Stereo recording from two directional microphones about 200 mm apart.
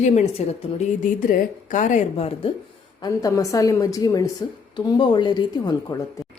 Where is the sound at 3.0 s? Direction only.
15° left (ahead or behind).